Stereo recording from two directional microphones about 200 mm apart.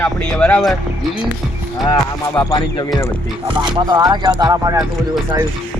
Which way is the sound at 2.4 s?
15° left (ahead or behind).